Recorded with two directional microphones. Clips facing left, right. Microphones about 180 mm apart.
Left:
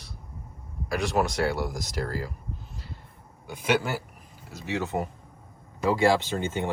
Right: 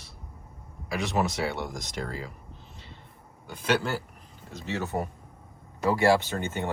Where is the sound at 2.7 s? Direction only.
Centre (ahead or behind).